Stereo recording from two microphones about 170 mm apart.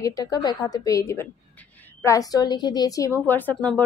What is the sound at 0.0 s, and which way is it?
A woman's voice, 20° left (ahead or behind).